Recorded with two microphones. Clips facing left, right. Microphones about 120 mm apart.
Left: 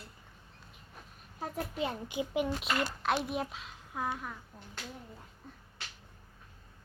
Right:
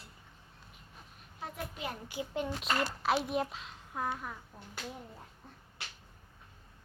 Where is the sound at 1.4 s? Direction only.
40° left (ahead or behind).